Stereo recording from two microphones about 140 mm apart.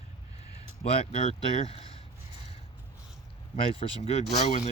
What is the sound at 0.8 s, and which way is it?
Speech, 45° left (ahead or behind).